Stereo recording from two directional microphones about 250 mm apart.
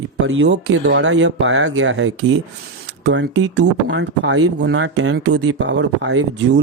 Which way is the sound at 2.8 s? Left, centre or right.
Right.